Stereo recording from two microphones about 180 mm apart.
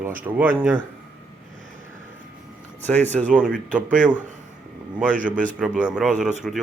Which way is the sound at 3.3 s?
5° right (ahead or behind).